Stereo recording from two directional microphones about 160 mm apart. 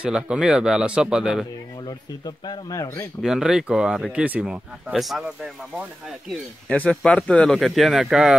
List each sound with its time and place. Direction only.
0.0 s speech: 5° right (ahead or behind)
1.9 s speech: 25° left (ahead or behind)
3.2 s speech: 5° right (ahead or behind)
6.7 s speech: 5° left (ahead or behind)